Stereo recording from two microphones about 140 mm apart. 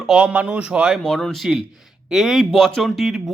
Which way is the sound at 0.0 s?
5° right (ahead or behind).